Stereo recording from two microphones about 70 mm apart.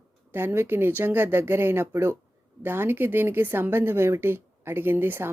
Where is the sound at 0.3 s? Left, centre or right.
Right.